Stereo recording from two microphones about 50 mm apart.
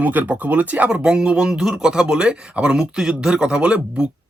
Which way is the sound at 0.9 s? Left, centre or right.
Centre.